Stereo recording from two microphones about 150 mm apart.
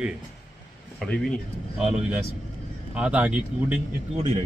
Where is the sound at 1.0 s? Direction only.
5° left (ahead or behind).